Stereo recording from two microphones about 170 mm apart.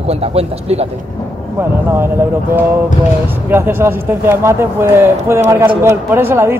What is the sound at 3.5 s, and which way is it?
Speech, 15° right (ahead or behind).